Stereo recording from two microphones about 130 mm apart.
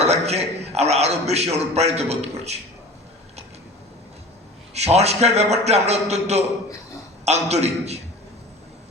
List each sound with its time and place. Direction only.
0.0 s a man's voice: 55° right (ahead or behind)
4.7 s a man's voice: 55° right (ahead or behind)